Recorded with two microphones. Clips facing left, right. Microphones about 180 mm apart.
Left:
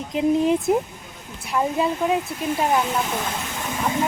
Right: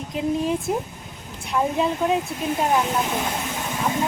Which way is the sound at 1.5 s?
Centre (ahead or behind).